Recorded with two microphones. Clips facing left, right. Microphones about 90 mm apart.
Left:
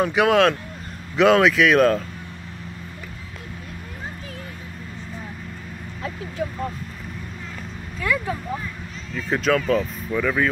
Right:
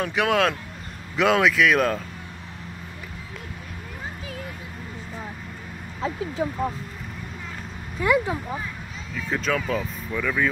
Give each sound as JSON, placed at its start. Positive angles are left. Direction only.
{"t": 0.0, "sound": "speech", "side_deg": 5}
{"t": 6.0, "sound": "speech", "side_deg": -20}
{"t": 8.0, "sound": "speech", "side_deg": -20}
{"t": 9.3, "sound": "speech", "side_deg": 0}
{"t": 10.1, "sound": "speech", "side_deg": 10}